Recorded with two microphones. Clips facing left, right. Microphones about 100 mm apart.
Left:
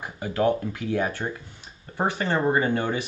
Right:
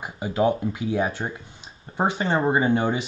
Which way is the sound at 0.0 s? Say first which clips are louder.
Right 1 dB; 20° right (ahead or behind).